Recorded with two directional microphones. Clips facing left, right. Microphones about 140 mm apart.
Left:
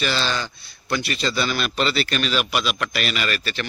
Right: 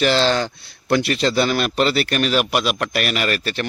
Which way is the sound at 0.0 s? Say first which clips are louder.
Right 7 dB; 75° right (ahead or behind).